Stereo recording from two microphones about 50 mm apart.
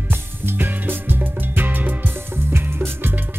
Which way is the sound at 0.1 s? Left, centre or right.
Right.